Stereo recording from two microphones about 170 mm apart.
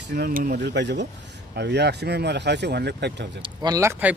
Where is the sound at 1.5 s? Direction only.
80° right.